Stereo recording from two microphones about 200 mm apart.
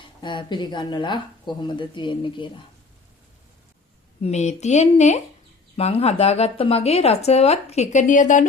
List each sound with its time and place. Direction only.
0.2 s speech: 25° left (ahead or behind)
4.2 s speech: 35° left (ahead or behind)